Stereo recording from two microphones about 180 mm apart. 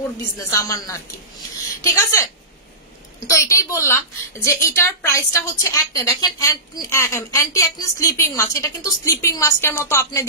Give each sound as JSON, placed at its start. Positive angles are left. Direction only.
{"t": 0.4, "sound": "a woman's voice", "side_deg": 15}
{"t": 3.3, "sound": "a woman's voice", "side_deg": 15}